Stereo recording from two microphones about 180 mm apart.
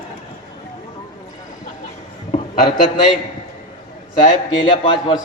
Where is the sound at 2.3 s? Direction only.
25° left (ahead or behind).